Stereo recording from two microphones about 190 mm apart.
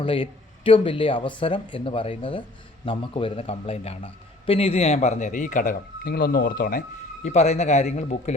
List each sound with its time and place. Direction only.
0.0 s a man's voice: 30° left (ahead or behind)